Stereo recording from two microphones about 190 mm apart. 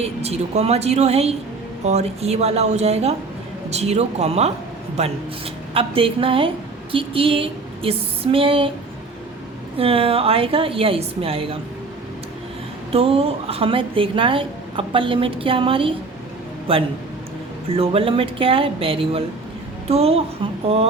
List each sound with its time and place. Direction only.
0.0 s a woman's voice: 35° right (ahead or behind)
5.7 s a woman's voice: 30° right (ahead or behind)
9.7 s a woman's voice: 30° right (ahead or behind)
12.9 s a woman's voice: 30° right (ahead or behind)